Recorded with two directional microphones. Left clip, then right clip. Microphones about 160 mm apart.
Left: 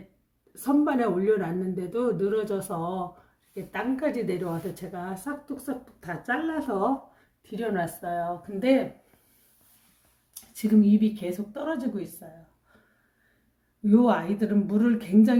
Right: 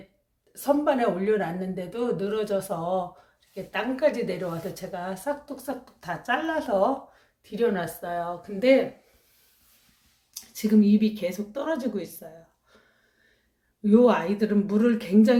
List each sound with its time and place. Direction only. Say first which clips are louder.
0.6 s speech: right 2 dB; 15° right (ahead or behind)
7.5 s speech: right 4 dB; 5° right (ahead or behind)
10.5 s speech: right 1 dB; 10° right (ahead or behind)
13.8 s speech: right 3 dB; 10° right (ahead or behind)